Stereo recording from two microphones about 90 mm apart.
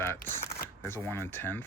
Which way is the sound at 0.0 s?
25° left (ahead or behind).